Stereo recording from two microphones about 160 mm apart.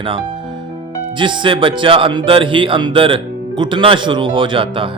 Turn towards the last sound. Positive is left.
turn(degrees=-35)  # may be behind; listen again after turning